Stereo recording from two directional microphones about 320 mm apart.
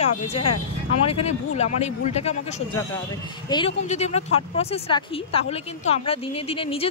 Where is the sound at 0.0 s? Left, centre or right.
Centre.